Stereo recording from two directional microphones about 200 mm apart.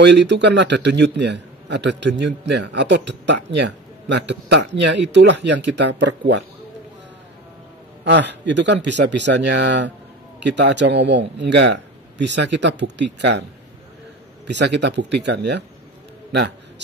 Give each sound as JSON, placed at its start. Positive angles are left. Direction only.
{"t": 0.0, "sound": "a man's voice", "side_deg": -60}
{"t": 8.0, "sound": "a man's voice", "side_deg": -60}
{"t": 14.4, "sound": "a man's voice", "side_deg": -60}
{"t": 16.3, "sound": "a sound", "side_deg": -60}